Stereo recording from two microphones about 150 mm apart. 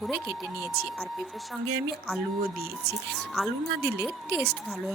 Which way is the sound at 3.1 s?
Centre (ahead or behind).